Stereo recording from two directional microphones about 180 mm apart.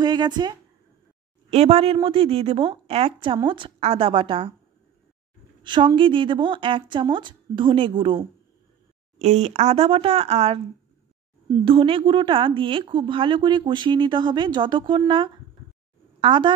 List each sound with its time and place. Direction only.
0.0 s a woman's voice: 25° right (ahead or behind)
1.5 s a woman's voice: 35° right (ahead or behind)
5.6 s a woman's voice: 25° right (ahead or behind)
9.2 s a woman's voice: 40° right (ahead or behind)